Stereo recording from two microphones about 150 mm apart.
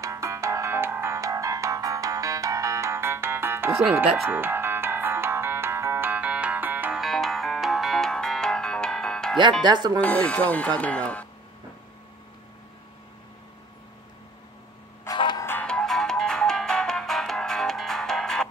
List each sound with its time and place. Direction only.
0.0 s music: 20° right (ahead or behind)
7.0 s music: centre (ahead or behind)
9.4 s speech: 30° right (ahead or behind)
9.9 s speech: 10° left (ahead or behind)
15.0 s music: 30° left (ahead or behind)
15.4 s music: 10° left (ahead or behind)